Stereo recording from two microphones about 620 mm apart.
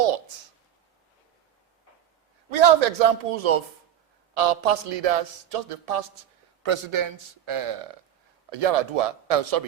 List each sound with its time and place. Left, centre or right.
0.0 s a sound: right
2.5 s a man's voice: right
6.6 s speech: right
8.4 s a man's voice: right